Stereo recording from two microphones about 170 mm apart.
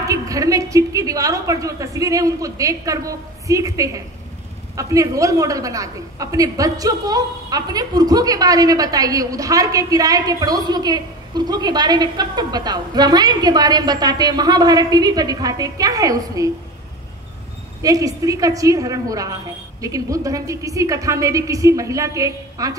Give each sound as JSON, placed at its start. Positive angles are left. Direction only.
{"t": 0.0, "sound": "a woman's voice", "side_deg": -20}
{"t": 17.8, "sound": "a woman's voice", "side_deg": -20}